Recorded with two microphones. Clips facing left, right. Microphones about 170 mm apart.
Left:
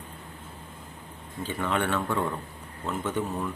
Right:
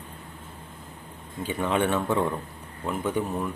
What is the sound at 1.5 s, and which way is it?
Speech, 15° right (ahead or behind).